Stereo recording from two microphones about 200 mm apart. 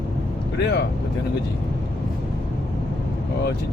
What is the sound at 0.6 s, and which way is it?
Speech, 55° left (ahead or behind).